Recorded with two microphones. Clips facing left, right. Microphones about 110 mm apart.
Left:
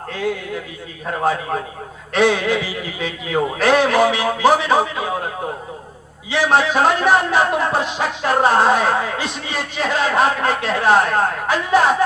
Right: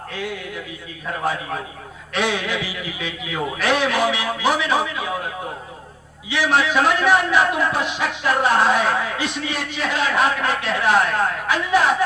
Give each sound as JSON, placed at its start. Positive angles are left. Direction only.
{"t": 0.1, "sound": "a man's voice", "side_deg": 35}
{"t": 2.1, "sound": "speech", "side_deg": 35}
{"t": 6.3, "sound": "speech", "side_deg": 35}